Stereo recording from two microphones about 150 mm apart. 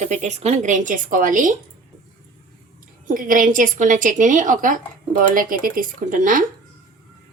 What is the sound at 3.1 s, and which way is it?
A woman's voice, 65° right (ahead or behind).